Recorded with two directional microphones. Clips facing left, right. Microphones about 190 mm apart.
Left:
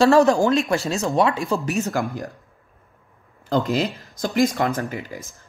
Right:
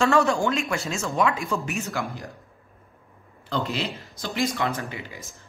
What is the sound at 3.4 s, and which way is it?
Speech, 45° left (ahead or behind).